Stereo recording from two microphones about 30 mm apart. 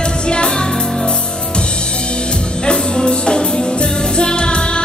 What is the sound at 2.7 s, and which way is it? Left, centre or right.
Music, left.